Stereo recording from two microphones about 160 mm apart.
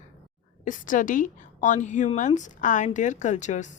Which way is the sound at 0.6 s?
55° left (ahead or behind).